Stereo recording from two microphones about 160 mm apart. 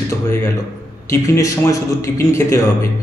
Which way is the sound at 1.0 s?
20° left (ahead or behind).